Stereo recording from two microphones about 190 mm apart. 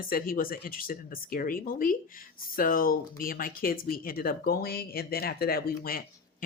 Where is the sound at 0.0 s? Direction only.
50° left (ahead or behind).